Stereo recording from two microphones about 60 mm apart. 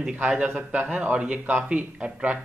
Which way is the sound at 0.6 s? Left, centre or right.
Centre.